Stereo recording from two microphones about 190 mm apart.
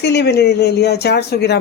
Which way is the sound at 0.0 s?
60° left (ahead or behind).